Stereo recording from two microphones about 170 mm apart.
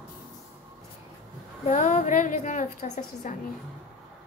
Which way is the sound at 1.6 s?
45° left (ahead or behind).